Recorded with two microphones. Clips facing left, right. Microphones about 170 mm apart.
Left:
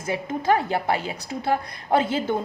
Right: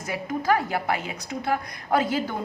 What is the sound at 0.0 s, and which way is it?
A woman's voice, 25° left (ahead or behind).